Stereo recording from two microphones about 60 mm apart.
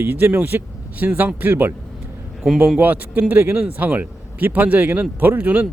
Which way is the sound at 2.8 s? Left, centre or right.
Right.